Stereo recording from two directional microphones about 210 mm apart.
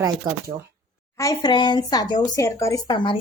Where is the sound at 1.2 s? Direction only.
15° left (ahead or behind).